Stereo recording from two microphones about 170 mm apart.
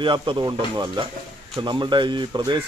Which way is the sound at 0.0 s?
30° right (ahead or behind).